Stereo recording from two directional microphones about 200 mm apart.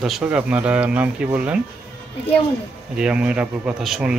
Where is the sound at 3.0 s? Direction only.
5° right (ahead or behind).